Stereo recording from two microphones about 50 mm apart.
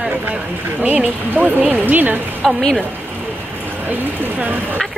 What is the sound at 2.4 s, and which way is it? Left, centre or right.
Speech, centre.